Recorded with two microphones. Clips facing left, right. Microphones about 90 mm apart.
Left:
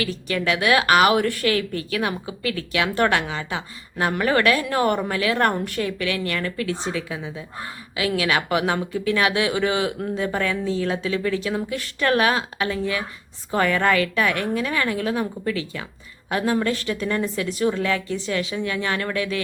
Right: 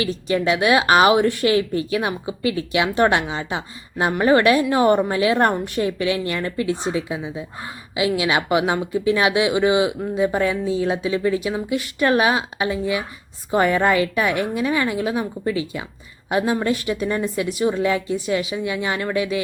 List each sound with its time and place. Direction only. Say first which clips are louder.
0.0 s a woman's voice: right 4 dB; 20° right (ahead or behind)